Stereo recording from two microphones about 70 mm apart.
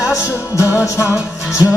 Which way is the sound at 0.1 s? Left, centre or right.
Left.